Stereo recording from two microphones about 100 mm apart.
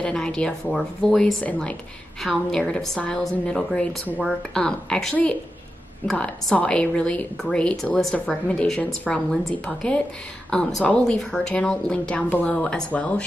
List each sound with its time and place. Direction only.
0.0 s a woman's voice: 10° left (ahead or behind)
9.1 s a woman's voice: 5° right (ahead or behind)
9.7 s a woman's voice: 10° left (ahead or behind)